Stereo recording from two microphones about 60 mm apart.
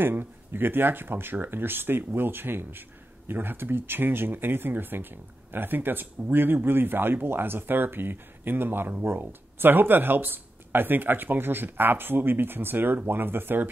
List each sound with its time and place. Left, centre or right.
0.0 s speech: right